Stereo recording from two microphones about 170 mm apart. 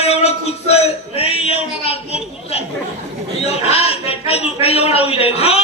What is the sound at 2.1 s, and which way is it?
A man's voice, 35° left (ahead or behind).